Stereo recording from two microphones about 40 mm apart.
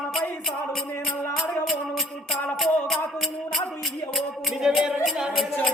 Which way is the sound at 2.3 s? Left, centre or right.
Centre.